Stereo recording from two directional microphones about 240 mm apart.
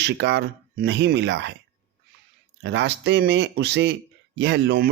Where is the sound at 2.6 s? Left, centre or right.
Right.